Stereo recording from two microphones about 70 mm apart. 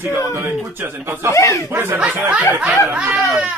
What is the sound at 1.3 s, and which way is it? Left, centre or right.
Speech, left.